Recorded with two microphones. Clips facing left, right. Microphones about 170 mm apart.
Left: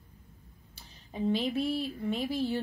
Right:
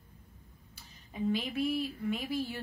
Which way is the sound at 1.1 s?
30° left (ahead or behind).